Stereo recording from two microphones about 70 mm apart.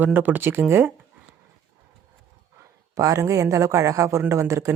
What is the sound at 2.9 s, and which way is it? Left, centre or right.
Speech, right.